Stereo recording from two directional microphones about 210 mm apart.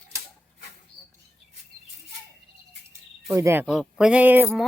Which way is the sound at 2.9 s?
15° right (ahead or behind).